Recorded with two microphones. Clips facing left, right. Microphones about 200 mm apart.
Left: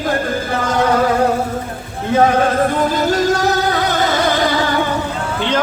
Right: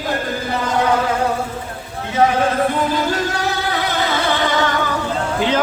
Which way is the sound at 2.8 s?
40° left (ahead or behind).